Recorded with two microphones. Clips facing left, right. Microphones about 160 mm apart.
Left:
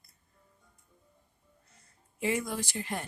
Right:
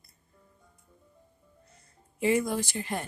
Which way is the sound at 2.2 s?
30° right (ahead or behind).